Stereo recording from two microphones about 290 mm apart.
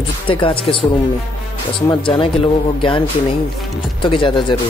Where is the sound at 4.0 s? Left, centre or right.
Centre.